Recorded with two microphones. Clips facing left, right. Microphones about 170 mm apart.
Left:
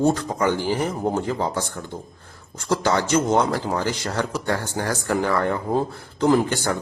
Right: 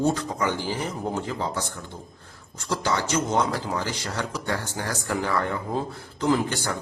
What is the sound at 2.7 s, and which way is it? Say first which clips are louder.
Speech: left 5 dB; 50° left (ahead or behind).